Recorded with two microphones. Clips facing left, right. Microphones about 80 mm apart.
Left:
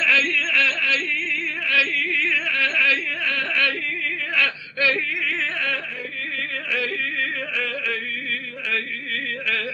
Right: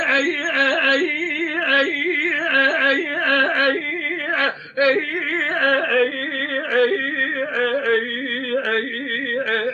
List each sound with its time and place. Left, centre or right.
0.0 s music: right
0.8 s yodeling: right
1.6 s music: right
2.5 s carnatic music: right
4.4 s a sound: right
5.5 s carnatic music: right
6.7 s yodeling: right